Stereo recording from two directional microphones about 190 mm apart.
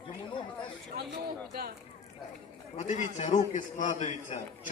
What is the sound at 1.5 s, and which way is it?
Speech, 55° right (ahead or behind).